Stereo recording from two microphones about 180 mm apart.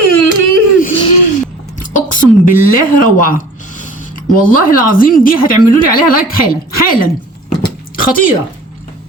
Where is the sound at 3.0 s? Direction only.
50° left (ahead or behind).